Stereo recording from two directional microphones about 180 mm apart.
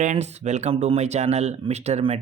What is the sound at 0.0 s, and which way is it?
Speech, 40° right (ahead or behind).